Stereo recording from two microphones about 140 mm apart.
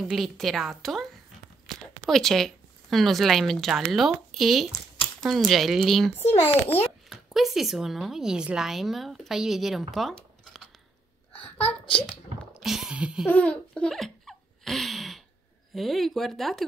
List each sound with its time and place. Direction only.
0.1 s speech: centre (ahead or behind)
6.2 s a child's voice: 15° left (ahead or behind)
7.1 s speech: centre (ahead or behind)
11.3 s a sound: 10° left (ahead or behind)
11.6 s a child's voice: 40° left (ahead or behind)
12.5 s a sound: 5° right (ahead or behind)
13.3 s laughter: 10° left (ahead or behind)
15.7 s speech: centre (ahead or behind)